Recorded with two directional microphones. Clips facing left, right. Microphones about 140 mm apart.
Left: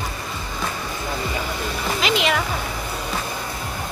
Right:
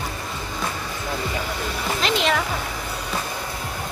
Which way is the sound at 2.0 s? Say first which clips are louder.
Left 1 dB; 5° left (ahead or behind).